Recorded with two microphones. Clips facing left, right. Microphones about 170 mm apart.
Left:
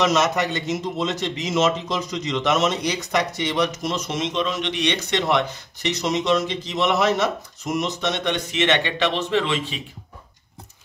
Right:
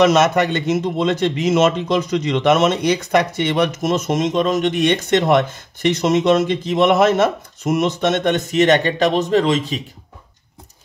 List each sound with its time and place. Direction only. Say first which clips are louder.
0.0 s a man's voice: right 6 dB; 60° right (ahead or behind); by 9.8 s 40° right (ahead or behind)